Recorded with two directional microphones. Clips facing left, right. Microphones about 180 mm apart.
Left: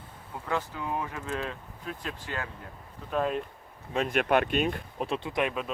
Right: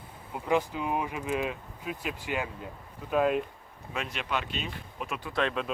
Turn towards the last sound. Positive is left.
turn(degrees=15)  # may be behind; listen again after turning